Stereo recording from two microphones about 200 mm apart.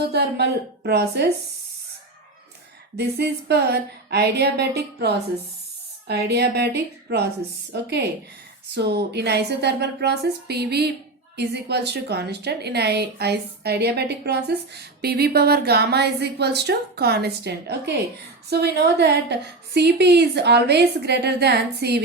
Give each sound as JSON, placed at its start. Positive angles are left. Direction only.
{"t": 0.0, "sound": "a woman's voice", "side_deg": -55}
{"t": 3.0, "sound": "a woman's voice", "side_deg": -55}